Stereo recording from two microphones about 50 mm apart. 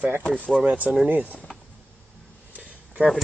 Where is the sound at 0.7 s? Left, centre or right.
Right.